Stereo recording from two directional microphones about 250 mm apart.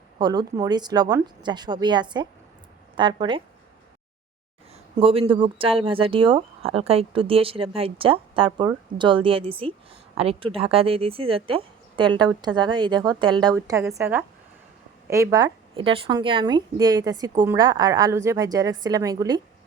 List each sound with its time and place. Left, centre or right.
0.2 s speech: centre
4.7 s a sound: right
5.3 s a woman's voice: right